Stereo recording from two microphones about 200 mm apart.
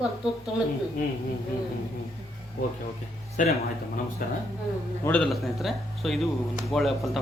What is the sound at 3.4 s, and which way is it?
Speech, 40° left (ahead or behind).